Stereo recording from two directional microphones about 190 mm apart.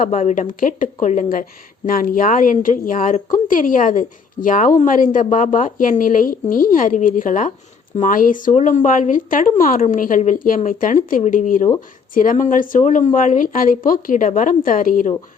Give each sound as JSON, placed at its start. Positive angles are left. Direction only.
{"t": 0.0, "sound": "speech", "side_deg": 35}